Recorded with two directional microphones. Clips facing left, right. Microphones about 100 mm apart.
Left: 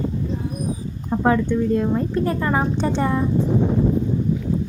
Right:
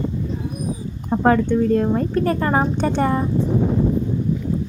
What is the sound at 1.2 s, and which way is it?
A woman's voice, 55° right (ahead or behind).